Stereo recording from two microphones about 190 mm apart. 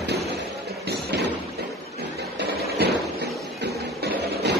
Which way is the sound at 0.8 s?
60° right (ahead or behind).